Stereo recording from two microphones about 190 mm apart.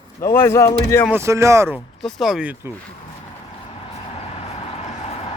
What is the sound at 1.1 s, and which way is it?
Speech, 15° right (ahead or behind).